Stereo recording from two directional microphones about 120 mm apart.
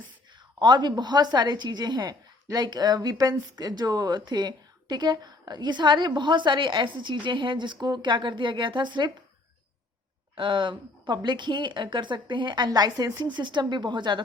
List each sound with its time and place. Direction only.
0.3 s a woman's voice: 40° right (ahead or behind)
10.3 s a woman's voice: 45° right (ahead or behind)